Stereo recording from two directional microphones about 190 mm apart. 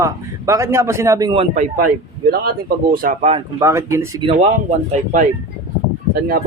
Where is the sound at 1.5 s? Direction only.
45° right (ahead or behind).